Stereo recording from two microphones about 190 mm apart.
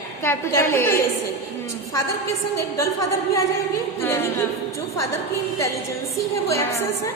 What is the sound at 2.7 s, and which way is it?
A woman's voice, 15° left (ahead or behind).